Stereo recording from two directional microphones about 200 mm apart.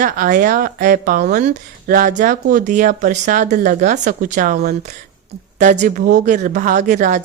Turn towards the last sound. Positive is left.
turn(degrees=-40)  # may be behind; listen again after turning